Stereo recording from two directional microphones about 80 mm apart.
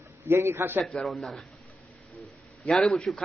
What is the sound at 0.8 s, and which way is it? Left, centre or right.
Speech, centre.